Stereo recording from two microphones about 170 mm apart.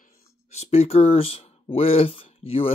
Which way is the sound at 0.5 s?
40° left (ahead or behind).